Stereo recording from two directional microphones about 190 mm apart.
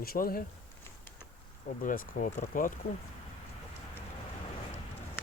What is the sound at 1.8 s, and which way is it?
Speech, 45° left (ahead or behind).